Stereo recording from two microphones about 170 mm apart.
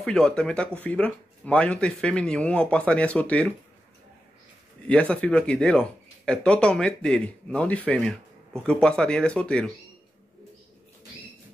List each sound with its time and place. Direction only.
0.0 s speech: 5° left (ahead or behind)
4.8 s speech: 5° left (ahead or behind)